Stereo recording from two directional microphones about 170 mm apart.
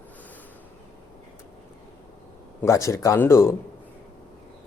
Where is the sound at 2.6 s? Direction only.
20° left (ahead or behind).